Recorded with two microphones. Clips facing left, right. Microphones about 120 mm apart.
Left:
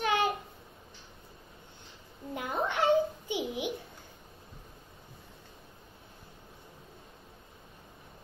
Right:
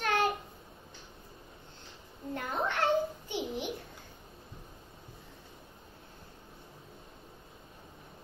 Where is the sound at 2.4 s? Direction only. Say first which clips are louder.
Left 2 dB; 10° left (ahead or behind).